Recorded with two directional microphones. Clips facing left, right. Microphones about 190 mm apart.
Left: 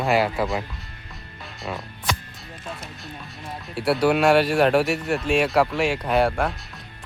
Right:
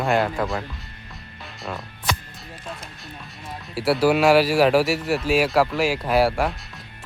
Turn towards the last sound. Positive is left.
turn(degrees=-5)  # may be behind; listen again after turning